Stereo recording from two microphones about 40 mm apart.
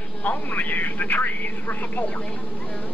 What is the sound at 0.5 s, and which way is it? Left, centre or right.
Speech, left.